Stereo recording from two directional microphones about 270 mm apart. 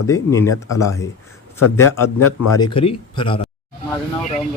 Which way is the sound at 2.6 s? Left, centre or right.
Centre.